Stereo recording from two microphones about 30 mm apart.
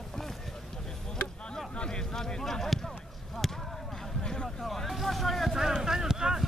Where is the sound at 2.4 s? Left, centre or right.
Centre.